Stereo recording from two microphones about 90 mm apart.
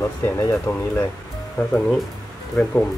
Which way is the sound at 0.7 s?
45° left (ahead or behind).